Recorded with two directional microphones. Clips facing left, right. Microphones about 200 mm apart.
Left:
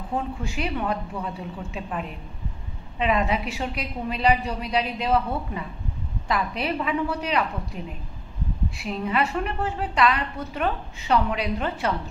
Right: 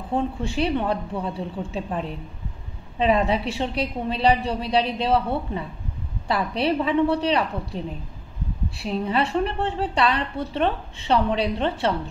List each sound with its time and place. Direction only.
0.4 s a woman's voice: 30° right (ahead or behind)